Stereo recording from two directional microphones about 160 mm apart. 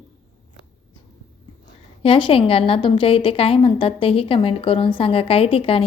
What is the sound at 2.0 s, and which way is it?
A woman's voice, 35° left (ahead or behind).